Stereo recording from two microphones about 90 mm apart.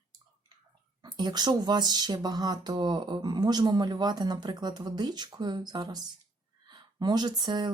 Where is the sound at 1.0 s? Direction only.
50° right (ahead or behind).